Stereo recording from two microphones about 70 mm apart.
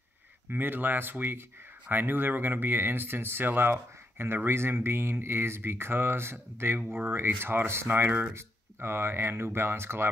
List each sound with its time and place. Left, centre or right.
0.5 s speech: right